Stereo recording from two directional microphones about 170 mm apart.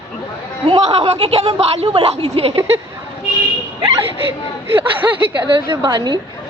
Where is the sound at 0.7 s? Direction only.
35° right (ahead or behind).